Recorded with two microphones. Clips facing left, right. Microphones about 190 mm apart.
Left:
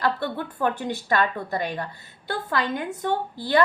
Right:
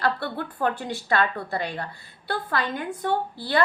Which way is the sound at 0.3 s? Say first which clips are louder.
Left 1 dB; 20° left (ahead or behind).